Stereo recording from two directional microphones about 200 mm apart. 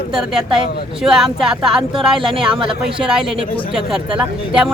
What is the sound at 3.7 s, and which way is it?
Speech, 5° right (ahead or behind).